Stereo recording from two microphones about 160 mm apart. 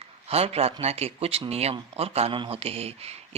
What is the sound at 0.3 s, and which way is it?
Speech, 40° right (ahead or behind).